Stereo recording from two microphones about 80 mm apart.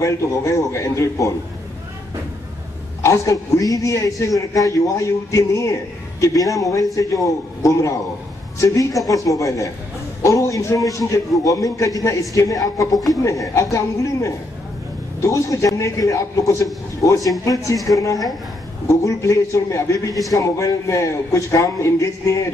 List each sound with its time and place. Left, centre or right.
0.0 s a man's voice: left
3.0 s a man's voice: left